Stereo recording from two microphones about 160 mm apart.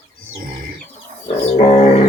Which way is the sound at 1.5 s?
45° left (ahead or behind).